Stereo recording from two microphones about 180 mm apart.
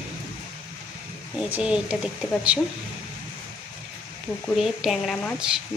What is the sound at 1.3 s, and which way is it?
Speech, 5° right (ahead or behind).